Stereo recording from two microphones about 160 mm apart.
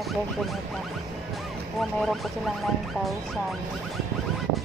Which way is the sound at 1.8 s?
Centre (ahead or behind).